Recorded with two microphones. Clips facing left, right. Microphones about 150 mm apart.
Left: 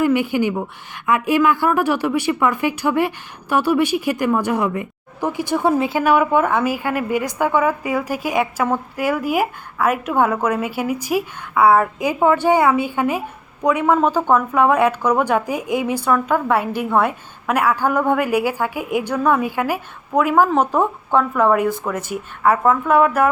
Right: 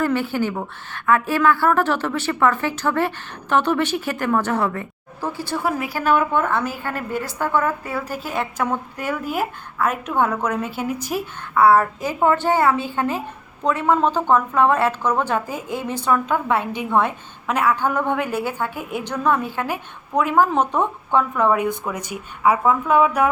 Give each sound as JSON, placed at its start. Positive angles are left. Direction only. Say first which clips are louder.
{"t": 0.0, "sound": "a woman's voice", "louder": "left 4 dB", "side_deg": 15}
{"t": 6.0, "sound": "a woman's voice", "louder": "left 1 dB", "side_deg": 10}